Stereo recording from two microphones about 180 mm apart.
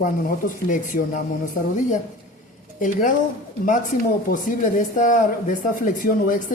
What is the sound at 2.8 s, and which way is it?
Speech, 45° left (ahead or behind).